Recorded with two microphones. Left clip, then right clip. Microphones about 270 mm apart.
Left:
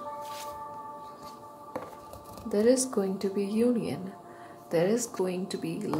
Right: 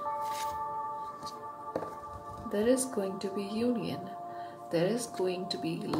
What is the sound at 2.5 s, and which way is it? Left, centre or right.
Speech, left.